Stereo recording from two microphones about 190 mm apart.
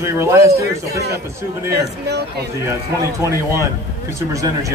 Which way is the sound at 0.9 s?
55° right (ahead or behind).